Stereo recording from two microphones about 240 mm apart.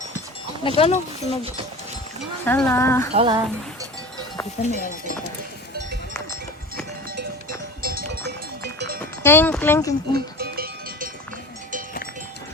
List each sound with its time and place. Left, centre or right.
0.8 s speech: left
2.4 s speech: centre
3.1 s music: right
4.6 s speech: left
7.8 s sheep: right
9.0 s speech: centre
10.2 s music: right